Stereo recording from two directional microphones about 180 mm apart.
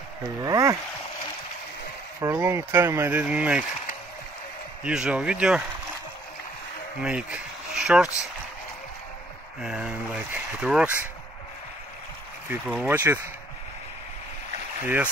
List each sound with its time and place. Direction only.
0.4 s speech: 20° right (ahead or behind)
2.3 s speech: 10° right (ahead or behind)
4.8 s speech: 5° right (ahead or behind)
7.0 s speech: 5° right (ahead or behind)
9.6 s speech: 5° right (ahead or behind)
12.6 s speech: 10° right (ahead or behind)